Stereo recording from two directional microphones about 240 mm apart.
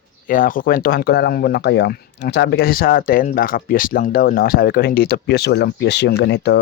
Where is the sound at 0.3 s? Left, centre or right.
Left.